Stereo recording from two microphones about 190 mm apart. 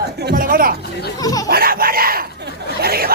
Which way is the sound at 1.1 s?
20° left (ahead or behind).